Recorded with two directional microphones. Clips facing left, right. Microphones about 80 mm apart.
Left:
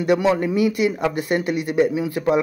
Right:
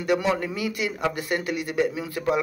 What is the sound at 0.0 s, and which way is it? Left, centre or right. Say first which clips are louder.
Speech: left 5 dB; left.